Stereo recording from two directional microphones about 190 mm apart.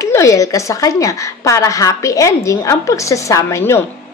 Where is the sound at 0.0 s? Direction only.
15° left (ahead or behind).